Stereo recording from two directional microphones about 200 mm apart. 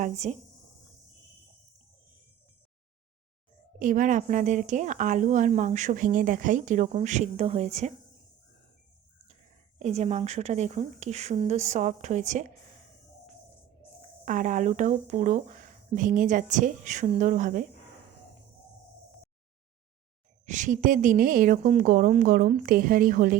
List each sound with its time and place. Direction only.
0.0 s a woman's voice: 35° right (ahead or behind)
3.8 s a woman's voice: 40° right (ahead or behind)
9.3 s a woman's voice: 35° right (ahead or behind)
14.3 s a woman's voice: 40° right (ahead or behind)
20.5 s a woman's voice: 40° right (ahead or behind)